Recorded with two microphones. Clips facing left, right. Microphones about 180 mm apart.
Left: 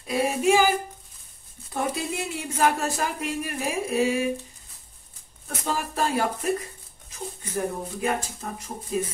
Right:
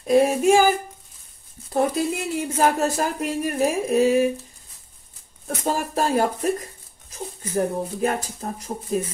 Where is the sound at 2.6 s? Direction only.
40° right (ahead or behind).